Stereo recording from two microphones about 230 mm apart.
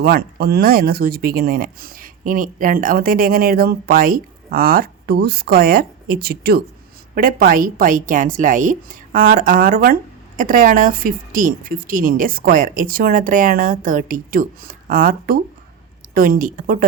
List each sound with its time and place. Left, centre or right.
0.0 s a woman's voice: right